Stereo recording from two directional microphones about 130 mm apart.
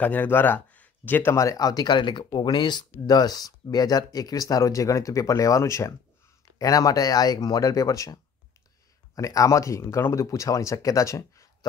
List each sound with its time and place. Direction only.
0.0 s speech: 15° left (ahead or behind)